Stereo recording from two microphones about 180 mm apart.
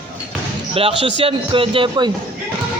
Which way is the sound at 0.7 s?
30° right (ahead or behind).